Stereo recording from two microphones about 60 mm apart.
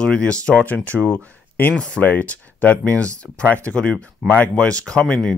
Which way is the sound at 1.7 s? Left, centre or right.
Centre.